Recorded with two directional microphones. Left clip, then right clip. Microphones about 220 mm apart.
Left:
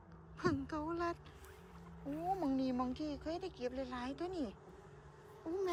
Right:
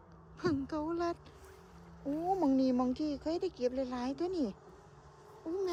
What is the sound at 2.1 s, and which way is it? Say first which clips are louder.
Speech: right 6 dB; 40° right (ahead or behind).